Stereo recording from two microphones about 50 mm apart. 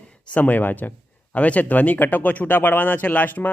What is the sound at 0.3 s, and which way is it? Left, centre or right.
Speech, left.